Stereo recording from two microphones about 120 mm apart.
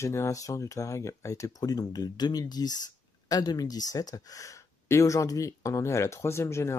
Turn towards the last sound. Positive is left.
turn(degrees=20)  # may be behind; listen again after turning